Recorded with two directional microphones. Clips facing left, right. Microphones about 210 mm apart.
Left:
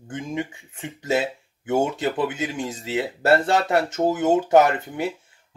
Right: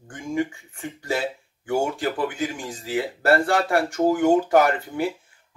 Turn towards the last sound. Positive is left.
turn(degrees=20)  # may be behind; listen again after turning